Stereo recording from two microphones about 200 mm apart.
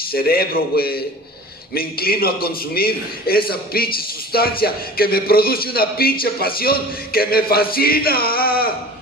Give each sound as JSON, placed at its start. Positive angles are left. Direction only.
{"t": 0.1, "sound": "a man's voice", "side_deg": 50}